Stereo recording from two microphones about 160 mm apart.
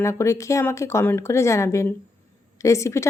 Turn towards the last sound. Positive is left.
turn(degrees=20)  # may be behind; listen again after turning